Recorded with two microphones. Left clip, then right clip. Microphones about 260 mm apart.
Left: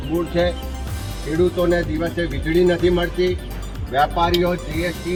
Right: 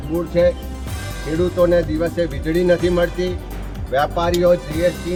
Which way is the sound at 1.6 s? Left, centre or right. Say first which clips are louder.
Right 4 dB; centre.